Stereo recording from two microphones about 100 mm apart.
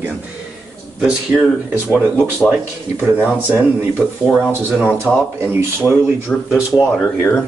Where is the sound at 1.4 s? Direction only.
20° left (ahead or behind).